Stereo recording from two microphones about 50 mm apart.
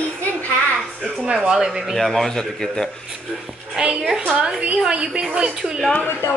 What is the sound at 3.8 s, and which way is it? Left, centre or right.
A man's voice, centre.